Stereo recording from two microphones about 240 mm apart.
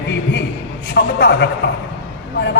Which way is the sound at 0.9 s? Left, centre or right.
Left.